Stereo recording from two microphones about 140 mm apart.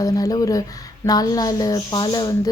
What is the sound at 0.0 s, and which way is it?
Speech, 25° left (ahead or behind).